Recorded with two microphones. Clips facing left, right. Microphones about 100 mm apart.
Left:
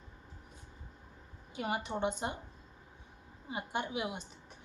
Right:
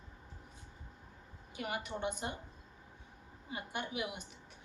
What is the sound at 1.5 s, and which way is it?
Speech, 25° left (ahead or behind).